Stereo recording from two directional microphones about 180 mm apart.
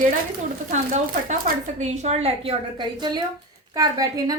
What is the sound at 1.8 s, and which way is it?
A woman's voice, 40° right (ahead or behind).